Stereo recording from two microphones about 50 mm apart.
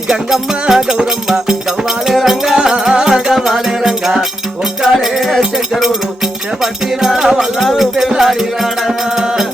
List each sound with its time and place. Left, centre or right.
0.1 s music: centre